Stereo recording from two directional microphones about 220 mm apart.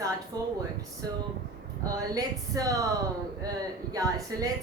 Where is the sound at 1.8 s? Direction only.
15° right (ahead or behind).